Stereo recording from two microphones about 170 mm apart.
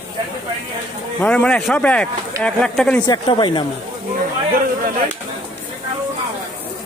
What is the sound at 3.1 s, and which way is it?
Speech, 30° left (ahead or behind).